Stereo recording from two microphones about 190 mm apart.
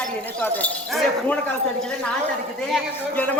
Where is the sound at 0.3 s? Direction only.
10° left (ahead or behind).